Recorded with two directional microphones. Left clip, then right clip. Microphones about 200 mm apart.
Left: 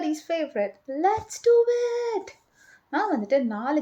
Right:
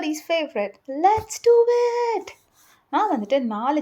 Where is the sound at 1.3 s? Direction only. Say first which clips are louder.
Right 3 dB; 75° right (ahead or behind).